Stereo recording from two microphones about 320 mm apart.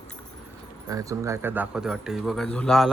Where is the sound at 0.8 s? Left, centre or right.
Centre.